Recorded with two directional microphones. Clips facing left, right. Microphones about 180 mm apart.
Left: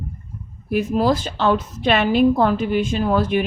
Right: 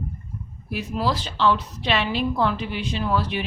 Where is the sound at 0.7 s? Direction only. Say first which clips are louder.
Left 7 dB; 50° left (ahead or behind).